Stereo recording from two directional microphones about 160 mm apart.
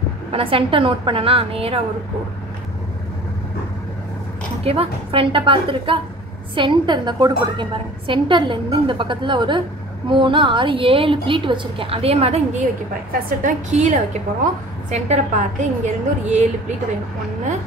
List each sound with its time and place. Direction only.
0.3 s a woman's voice: 35° right (ahead or behind)
4.6 s a woman's voice: 35° right (ahead or behind)
13.4 s a woman's voice: 50° right (ahead or behind)